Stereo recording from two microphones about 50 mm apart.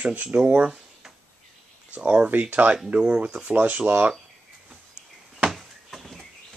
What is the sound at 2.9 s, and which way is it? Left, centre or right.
Speech, right.